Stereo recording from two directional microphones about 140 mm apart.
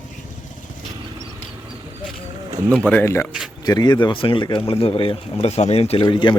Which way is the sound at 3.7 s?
30° left (ahead or behind).